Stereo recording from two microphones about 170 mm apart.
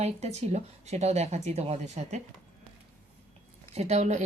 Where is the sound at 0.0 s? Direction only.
40° right (ahead or behind).